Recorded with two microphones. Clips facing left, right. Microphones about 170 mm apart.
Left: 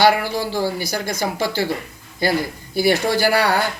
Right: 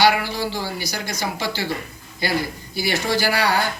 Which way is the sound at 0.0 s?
50° left (ahead or behind).